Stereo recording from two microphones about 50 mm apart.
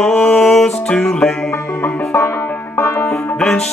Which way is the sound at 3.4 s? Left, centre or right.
Centre.